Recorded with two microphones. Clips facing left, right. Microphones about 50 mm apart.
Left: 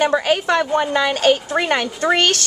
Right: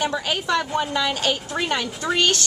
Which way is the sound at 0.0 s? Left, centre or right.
Left.